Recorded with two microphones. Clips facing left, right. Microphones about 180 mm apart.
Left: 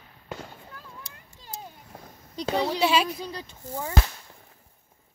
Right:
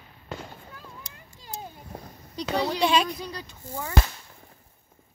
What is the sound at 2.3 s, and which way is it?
Speech, 25° left (ahead or behind).